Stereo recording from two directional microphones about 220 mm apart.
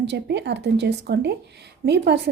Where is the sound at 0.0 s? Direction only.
50° right (ahead or behind).